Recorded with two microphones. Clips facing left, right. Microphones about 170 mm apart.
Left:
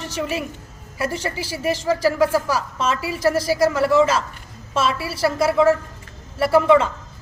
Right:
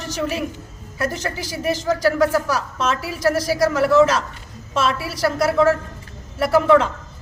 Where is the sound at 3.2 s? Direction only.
30° left (ahead or behind).